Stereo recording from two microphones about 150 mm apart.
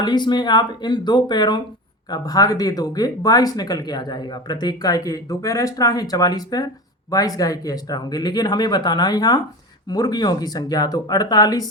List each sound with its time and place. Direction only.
0.0 s speech: 30° left (ahead or behind)